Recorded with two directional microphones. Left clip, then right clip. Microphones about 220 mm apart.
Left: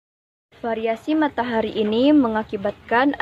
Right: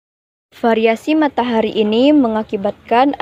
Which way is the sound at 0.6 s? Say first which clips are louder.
Right 9 dB; 40° right (ahead or behind).